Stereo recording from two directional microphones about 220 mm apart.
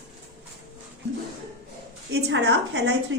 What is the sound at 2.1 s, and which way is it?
Speech, 55° right (ahead or behind).